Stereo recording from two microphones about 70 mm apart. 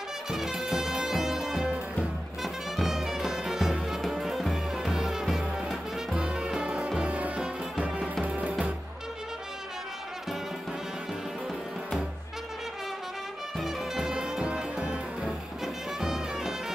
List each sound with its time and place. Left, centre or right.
0.3 s music: centre
13.6 s music: centre